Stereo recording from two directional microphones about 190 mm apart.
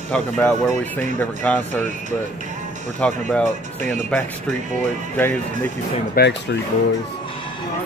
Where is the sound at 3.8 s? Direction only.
40° right (ahead or behind).